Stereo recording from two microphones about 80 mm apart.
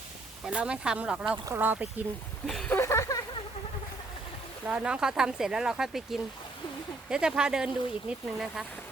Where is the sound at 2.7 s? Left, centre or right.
Left.